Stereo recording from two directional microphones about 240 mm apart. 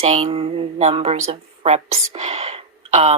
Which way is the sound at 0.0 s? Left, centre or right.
Right.